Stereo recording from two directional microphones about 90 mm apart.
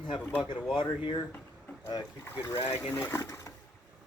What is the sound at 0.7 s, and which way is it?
Speech, 60° left (ahead or behind).